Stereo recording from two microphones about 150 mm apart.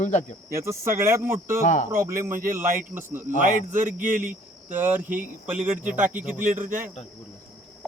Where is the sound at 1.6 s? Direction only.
55° left (ahead or behind).